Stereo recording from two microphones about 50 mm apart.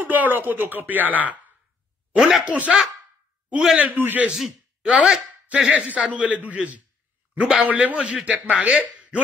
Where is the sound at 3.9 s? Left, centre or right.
Right.